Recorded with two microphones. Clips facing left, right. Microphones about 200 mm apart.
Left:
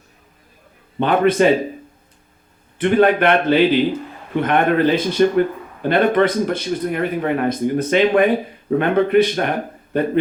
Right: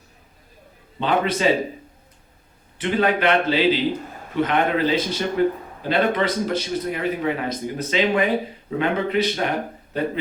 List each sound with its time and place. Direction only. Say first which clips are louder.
0.9 s a man's voice: left 7 dB; 55° left (ahead or behind)
2.7 s a man's voice: left 6 dB; 55° left (ahead or behind)